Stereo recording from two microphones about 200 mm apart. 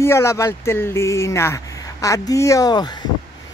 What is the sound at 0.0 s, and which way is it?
Speech, 15° left (ahead or behind).